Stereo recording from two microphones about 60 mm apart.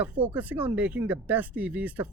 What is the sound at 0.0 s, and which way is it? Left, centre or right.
Speech, right.